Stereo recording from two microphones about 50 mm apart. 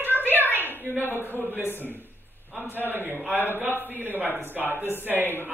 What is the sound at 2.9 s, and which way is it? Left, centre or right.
Speech, right.